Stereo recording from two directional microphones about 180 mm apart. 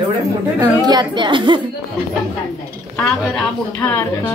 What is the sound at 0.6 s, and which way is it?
A woman's voice, 25° right (ahead or behind).